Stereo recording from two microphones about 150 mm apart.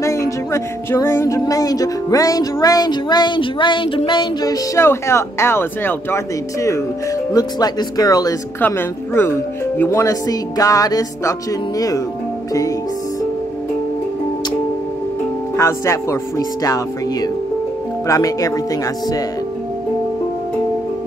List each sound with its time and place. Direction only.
0.0 s speech: 20° left (ahead or behind)
8.5 s speech: 15° left (ahead or behind)
15.5 s speech: 20° left (ahead or behind)